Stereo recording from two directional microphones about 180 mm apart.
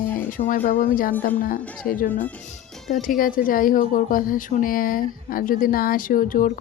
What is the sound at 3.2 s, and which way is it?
Speech, 50° left (ahead or behind).